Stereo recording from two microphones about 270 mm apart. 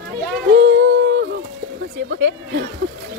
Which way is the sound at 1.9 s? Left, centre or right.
Right.